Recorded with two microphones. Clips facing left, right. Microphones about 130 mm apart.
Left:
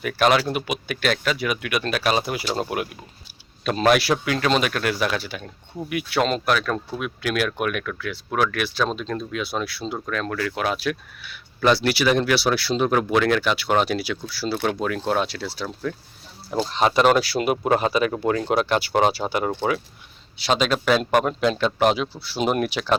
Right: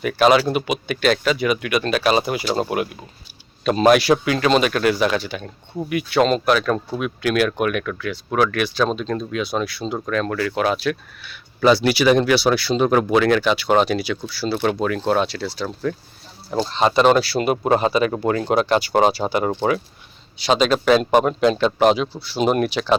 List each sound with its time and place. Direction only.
0.0 s speech: centre (ahead or behind)
16.7 s speech: 10° left (ahead or behind)